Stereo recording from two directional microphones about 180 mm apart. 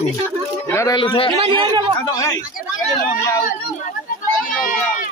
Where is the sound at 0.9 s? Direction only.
30° left (ahead or behind).